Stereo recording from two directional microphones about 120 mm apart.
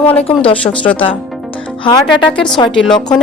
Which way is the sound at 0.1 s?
50° left (ahead or behind).